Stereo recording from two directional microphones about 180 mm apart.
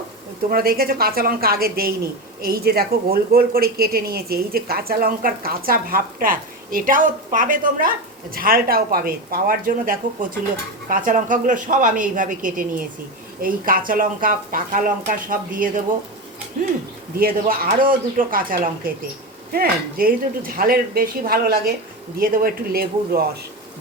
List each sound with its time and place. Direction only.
0.5 s speech: 55° right (ahead or behind)
17.2 s speech: 55° right (ahead or behind)